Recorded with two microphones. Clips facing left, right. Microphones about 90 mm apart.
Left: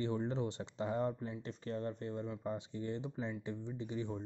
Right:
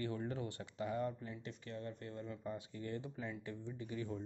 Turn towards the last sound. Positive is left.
turn(degrees=20)  # may be behind; listen again after turning